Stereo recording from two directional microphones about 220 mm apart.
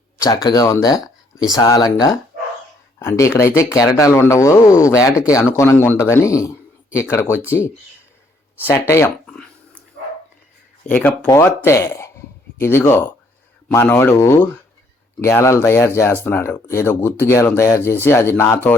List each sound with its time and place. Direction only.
0.4 s speech: 15° left (ahead or behind)
8.6 s a sound: 10° left (ahead or behind)
10.8 s speech: 10° left (ahead or behind)